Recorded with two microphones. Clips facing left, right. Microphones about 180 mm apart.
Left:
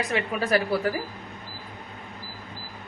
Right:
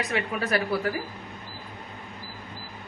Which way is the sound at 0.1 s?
30° left (ahead or behind).